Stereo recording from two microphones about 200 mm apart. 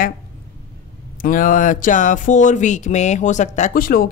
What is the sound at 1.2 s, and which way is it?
A man's voice, 40° left (ahead or behind).